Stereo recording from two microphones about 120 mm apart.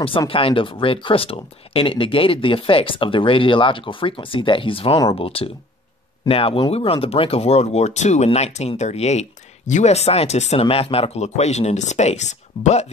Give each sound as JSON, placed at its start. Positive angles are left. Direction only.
{"t": 0.3, "sound": "speech", "side_deg": 50}